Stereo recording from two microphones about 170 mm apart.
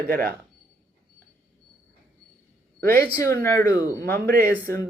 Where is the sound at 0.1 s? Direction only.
60° right (ahead or behind).